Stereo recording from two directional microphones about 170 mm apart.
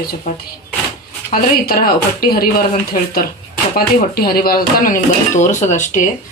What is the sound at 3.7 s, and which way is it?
Speech, 60° left (ahead or behind).